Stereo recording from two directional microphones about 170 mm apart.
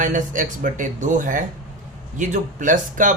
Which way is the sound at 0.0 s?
50° right (ahead or behind).